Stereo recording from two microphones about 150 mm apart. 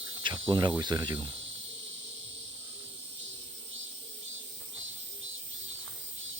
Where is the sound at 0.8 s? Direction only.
30° right (ahead or behind).